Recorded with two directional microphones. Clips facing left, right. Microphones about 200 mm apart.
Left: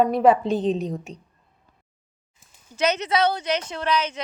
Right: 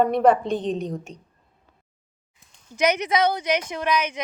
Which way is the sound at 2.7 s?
15° right (ahead or behind).